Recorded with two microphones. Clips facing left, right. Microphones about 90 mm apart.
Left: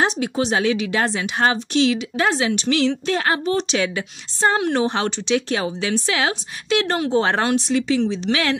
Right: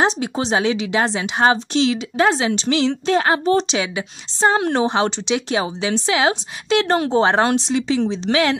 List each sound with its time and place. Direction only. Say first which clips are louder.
0.0 s a woman's voice: right 1 dB; 30° right (ahead or behind)
3.7 s a woman's voice: left 1 dB; 15° right (ahead or behind)